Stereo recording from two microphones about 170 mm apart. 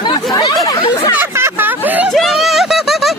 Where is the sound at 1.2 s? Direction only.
15° right (ahead or behind).